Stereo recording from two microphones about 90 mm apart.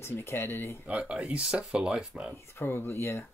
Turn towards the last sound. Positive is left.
turn(degrees=30)  # may be behind; listen again after turning